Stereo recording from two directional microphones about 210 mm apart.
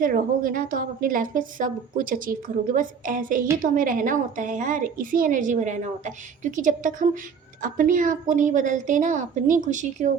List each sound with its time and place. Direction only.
0.0 s a woman's voice: 40° right (ahead or behind)